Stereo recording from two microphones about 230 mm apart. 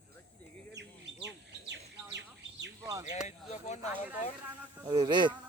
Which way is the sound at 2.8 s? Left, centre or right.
Centre.